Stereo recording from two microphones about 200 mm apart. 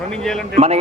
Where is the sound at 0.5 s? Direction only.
30° right (ahead or behind).